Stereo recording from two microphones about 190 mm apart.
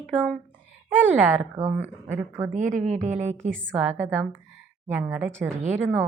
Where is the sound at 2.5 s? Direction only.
40° right (ahead or behind).